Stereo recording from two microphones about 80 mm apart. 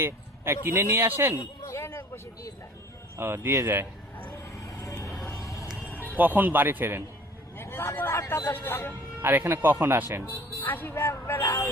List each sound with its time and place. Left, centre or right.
0.0 s a man's voice: right
1.4 s speech: left
3.2 s a man's voice: right
4.6 s vehicle: left
5.2 s a sound: left
5.8 s speech: right
7.5 s a man's voice: left
9.2 s speech: right
10.2 s speech: left
11.4 s a man's voice: left